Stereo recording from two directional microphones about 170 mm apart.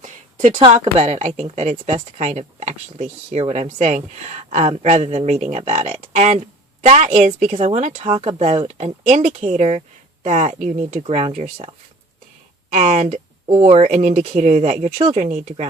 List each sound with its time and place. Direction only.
0.0 s a sound: 45° right (ahead or behind)
0.6 s a woman's voice: 35° right (ahead or behind)
12.7 s speech: 40° right (ahead or behind)